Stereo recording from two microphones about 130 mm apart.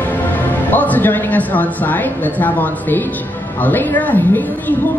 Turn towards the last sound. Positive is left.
turn(degrees=15)  # may be behind; listen again after turning